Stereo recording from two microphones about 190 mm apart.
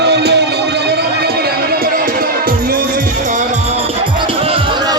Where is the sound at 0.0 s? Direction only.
60° right (ahead or behind).